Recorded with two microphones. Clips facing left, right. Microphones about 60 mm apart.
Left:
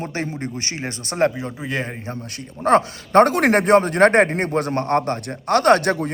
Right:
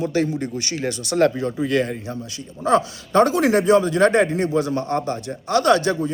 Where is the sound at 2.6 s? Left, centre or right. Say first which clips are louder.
Left 2 dB; left.